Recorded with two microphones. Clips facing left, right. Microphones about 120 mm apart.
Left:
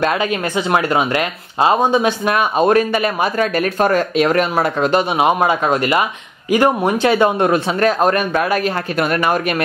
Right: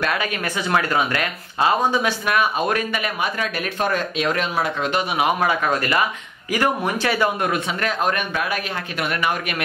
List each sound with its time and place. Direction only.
0.0 s speech: 25° left (ahead or behind); by 5.0 s 40° left (ahead or behind)
5.1 s speech: 25° left (ahead or behind); by 9.4 s 45° left (ahead or behind)